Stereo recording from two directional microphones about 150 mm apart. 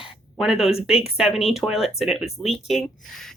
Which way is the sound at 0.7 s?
40° left (ahead or behind).